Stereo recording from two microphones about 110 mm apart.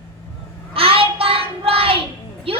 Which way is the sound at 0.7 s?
55° right (ahead or behind).